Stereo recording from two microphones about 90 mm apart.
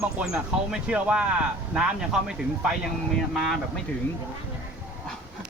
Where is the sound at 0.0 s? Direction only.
10° right (ahead or behind).